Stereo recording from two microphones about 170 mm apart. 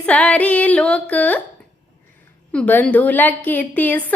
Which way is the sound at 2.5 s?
10° left (ahead or behind).